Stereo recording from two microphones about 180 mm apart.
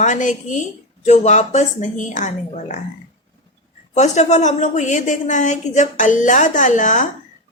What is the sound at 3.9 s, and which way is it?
A woman's voice, 40° left (ahead or behind).